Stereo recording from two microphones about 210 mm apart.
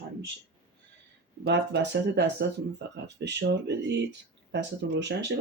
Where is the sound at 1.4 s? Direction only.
55° right (ahead or behind).